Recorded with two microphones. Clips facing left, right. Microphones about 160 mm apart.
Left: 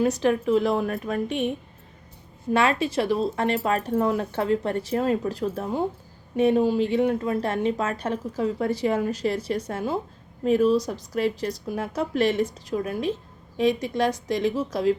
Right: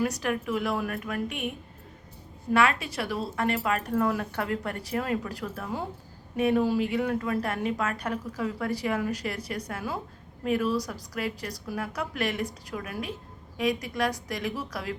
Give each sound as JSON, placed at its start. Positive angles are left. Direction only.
{"t": 0.0, "sound": "a woman's voice", "side_deg": 25}